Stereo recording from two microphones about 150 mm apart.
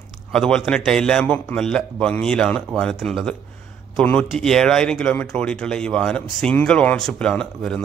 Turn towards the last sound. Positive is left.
turn(degrees=5)  # may be behind; listen again after turning